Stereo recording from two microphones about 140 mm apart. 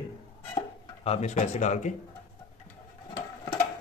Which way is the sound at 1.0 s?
50° left (ahead or behind).